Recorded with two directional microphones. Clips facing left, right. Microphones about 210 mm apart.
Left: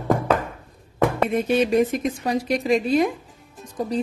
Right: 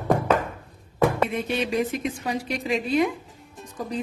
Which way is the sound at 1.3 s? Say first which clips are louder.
Left 6 dB; 40° left (ahead or behind).